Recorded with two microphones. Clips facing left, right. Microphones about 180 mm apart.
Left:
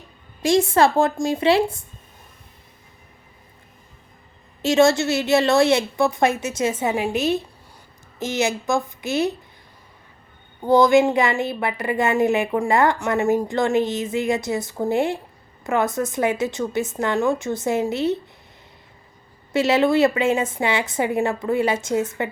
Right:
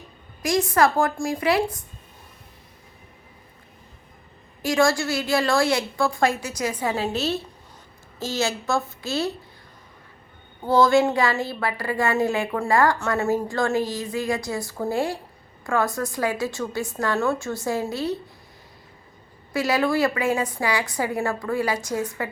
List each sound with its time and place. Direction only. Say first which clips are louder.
0.4 s a woman's voice: left 3 dB; 25° left (ahead or behind)
4.6 s a woman's voice: left 4 dB; 25° left (ahead or behind)
10.6 s a woman's voice: left 3 dB; 15° left (ahead or behind)
19.5 s a woman's voice: left 4 dB; 25° left (ahead or behind)